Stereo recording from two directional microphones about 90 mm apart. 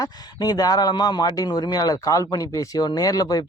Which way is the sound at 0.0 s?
45° left (ahead or behind).